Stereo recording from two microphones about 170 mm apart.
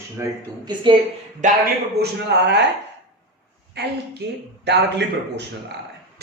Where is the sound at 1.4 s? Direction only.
45° right (ahead or behind).